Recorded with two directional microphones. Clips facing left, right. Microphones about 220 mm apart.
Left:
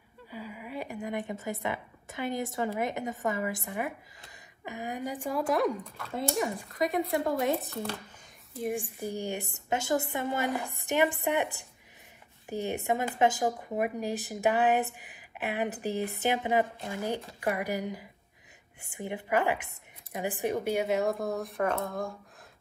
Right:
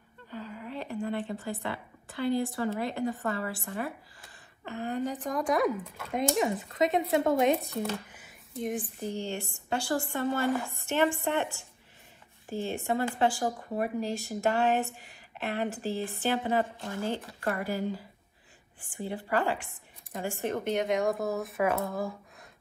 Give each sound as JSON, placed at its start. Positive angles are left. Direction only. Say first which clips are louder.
{"t": 0.3, "sound": "a woman's voice", "louder": "right 1 dB", "side_deg": 10}
{"t": 6.1, "sound": "speech", "louder": "right 3 dB", "side_deg": -20}
{"t": 9.0, "sound": "a woman's voice", "louder": "even", "side_deg": 15}
{"t": 12.4, "sound": "a woman's voice", "louder": "left 1 dB", "side_deg": 20}